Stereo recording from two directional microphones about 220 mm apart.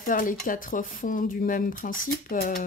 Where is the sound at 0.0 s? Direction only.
35° left (ahead or behind).